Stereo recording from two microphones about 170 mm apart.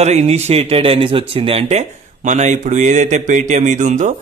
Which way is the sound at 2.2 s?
45° right (ahead or behind).